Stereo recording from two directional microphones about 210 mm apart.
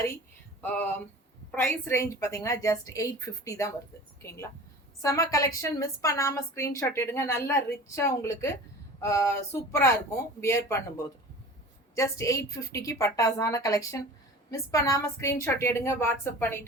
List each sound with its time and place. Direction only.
0.6 s a sound: 5° left (ahead or behind)
1.5 s a woman's voice: 10° left (ahead or behind)
11.9 s a woman's voice: 15° left (ahead or behind)